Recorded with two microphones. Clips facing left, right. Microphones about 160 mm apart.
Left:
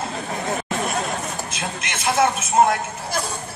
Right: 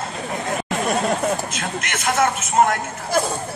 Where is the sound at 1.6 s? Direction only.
10° left (ahead or behind).